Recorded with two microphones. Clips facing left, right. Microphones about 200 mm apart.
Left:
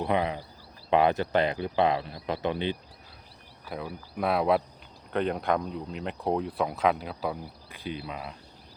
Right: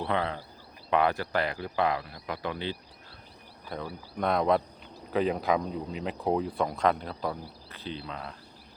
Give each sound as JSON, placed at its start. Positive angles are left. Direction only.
{"t": 0.0, "sound": "speech", "side_deg": 15}
{"t": 3.7, "sound": "speech", "side_deg": 5}